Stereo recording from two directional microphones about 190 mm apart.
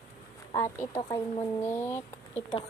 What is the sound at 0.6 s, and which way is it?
Speech, 15° left (ahead or behind).